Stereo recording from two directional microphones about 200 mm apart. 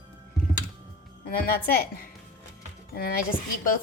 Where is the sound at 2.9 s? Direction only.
45° left (ahead or behind).